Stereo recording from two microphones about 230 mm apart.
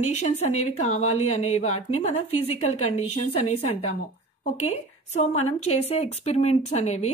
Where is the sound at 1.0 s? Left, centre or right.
Left.